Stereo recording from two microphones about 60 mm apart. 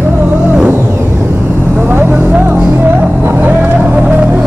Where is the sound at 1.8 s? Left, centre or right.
Right.